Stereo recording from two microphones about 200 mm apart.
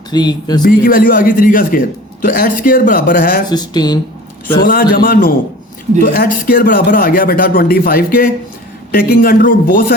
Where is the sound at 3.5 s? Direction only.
20° left (ahead or behind).